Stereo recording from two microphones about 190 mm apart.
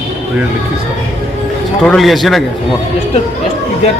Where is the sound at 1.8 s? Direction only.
Centre (ahead or behind).